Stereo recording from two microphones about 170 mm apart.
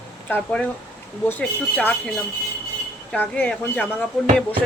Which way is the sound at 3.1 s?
10° left (ahead or behind).